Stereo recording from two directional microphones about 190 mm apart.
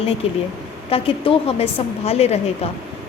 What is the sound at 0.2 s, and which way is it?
A woman's voice, 30° left (ahead or behind).